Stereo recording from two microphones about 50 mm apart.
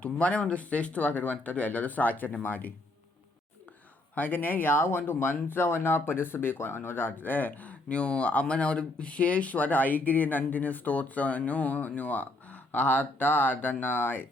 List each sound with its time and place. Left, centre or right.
0.0 s speech: left
4.1 s speech: left